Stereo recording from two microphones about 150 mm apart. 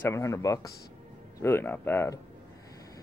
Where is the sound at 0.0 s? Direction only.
20° left (ahead or behind).